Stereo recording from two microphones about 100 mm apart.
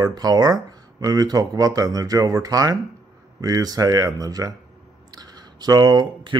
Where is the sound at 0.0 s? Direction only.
40° right (ahead or behind).